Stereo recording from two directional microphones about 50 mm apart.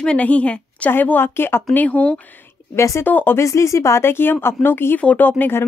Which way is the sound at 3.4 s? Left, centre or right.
Left.